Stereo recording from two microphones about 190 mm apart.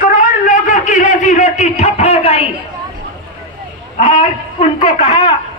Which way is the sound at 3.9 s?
40° left (ahead or behind).